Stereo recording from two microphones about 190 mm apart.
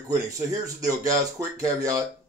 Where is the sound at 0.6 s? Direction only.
20° right (ahead or behind).